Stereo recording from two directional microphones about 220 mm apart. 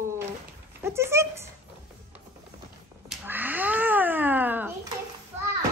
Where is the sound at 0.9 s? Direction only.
10° right (ahead or behind).